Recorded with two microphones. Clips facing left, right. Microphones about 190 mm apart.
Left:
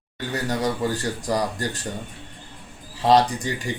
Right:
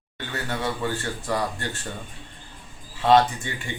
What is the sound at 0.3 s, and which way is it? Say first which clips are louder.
A man's voice: left 4 dB; 40° left (ahead or behind).